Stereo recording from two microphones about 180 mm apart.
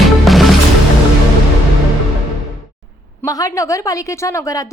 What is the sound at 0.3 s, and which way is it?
Music, centre (ahead or behind).